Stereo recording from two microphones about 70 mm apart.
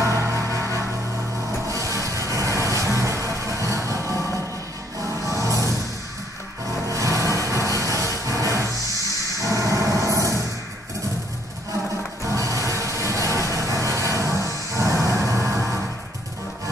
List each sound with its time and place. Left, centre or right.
0.0 s music: right
2.3 s vehicle: right
2.7 s music: right
5.2 s music: right
6.9 s vehicle: right
7.8 s music: right
9.4 s train: right
12.3 s music: right